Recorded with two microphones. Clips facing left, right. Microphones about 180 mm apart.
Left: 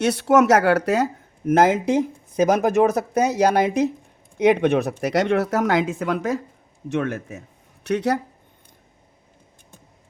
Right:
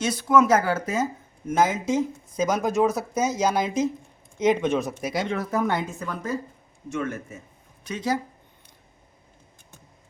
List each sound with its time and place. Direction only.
0.0 s speech: 70° left (ahead or behind)
1.5 s speech: 60° left (ahead or behind); by 6.4 s 85° left
6.8 s speech: 70° left (ahead or behind)